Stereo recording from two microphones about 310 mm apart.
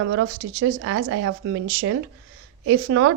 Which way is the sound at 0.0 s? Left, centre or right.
Right.